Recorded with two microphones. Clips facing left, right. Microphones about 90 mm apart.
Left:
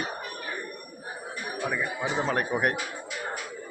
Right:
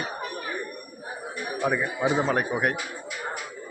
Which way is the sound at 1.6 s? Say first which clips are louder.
Right 5 dB; 15° right (ahead or behind).